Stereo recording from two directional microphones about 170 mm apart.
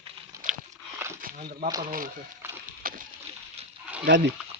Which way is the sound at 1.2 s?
60° right (ahead or behind).